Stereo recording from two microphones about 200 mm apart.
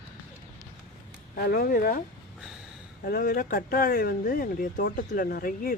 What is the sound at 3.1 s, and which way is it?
Speech, 45° left (ahead or behind).